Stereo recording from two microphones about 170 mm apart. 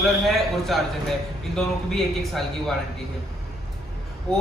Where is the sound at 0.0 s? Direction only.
Centre (ahead or behind).